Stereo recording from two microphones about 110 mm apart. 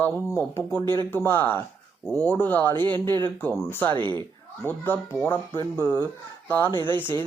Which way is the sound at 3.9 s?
45° right (ahead or behind).